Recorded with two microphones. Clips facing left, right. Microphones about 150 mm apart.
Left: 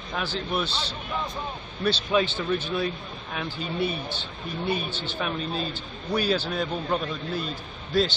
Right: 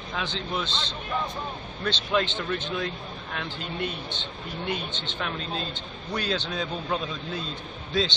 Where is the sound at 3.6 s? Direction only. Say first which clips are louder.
Left 6 dB; 90° right.